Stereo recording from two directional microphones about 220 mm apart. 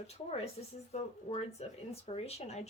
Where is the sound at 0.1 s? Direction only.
30° left (ahead or behind).